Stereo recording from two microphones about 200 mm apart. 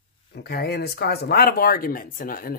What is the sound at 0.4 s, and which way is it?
Speech, 50° left (ahead or behind).